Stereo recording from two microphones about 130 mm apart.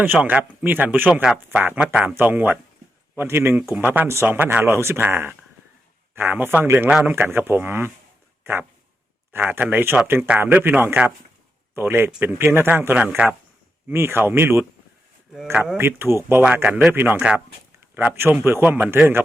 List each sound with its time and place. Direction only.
0.0 s speech: 15° right (ahead or behind)
9.3 s speech: 15° right (ahead or behind)
15.5 s speech: 5° right (ahead or behind)
15.8 s speech: 20° right (ahead or behind)